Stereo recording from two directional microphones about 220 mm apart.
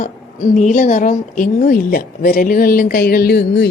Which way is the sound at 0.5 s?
35° left (ahead or behind).